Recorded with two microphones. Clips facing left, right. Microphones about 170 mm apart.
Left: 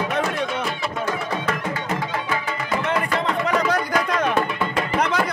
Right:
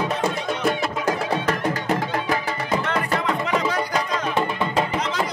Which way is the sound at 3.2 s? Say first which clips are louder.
Left 1 dB; 40° left (ahead or behind).